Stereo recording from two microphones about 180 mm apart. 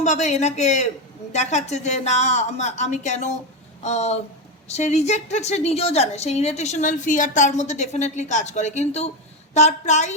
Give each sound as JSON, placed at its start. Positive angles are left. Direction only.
{"t": 0.0, "sound": "a woman's voice", "side_deg": 40}